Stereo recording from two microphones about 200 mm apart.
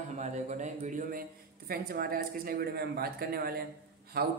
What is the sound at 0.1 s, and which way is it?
A man's voice, 35° right (ahead or behind).